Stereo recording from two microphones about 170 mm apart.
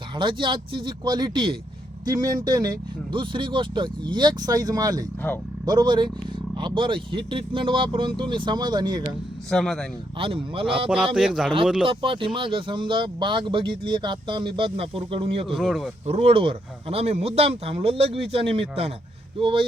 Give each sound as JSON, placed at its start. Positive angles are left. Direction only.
{"t": 0.2, "sound": "speech", "side_deg": -30}
{"t": 9.5, "sound": "speech", "side_deg": 5}
{"t": 10.2, "sound": "speech", "side_deg": -30}
{"t": 10.8, "sound": "speech", "side_deg": -5}
{"t": 11.9, "sound": "speech", "side_deg": -30}
{"t": 15.5, "sound": "speech", "side_deg": 0}
{"t": 16.0, "sound": "speech", "side_deg": -35}